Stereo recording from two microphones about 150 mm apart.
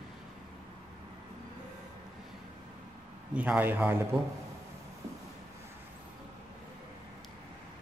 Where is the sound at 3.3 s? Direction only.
10° right (ahead or behind).